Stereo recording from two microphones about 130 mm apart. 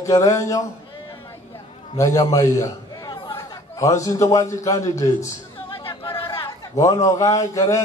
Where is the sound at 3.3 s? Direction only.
25° left (ahead or behind).